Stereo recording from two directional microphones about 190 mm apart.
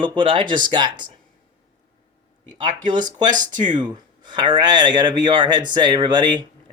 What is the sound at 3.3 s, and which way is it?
Speech, 40° right (ahead or behind).